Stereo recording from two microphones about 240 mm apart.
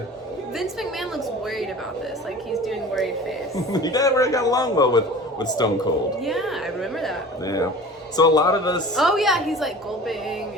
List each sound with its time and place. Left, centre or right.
2.5 s a sound: centre
3.7 s a man's voice: centre
6.2 s a woman's voice: centre
8.1 s a man's voice: centre
9.0 s a woman's voice: centre